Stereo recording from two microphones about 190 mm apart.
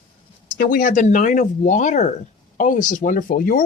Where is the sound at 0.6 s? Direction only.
50° left (ahead or behind).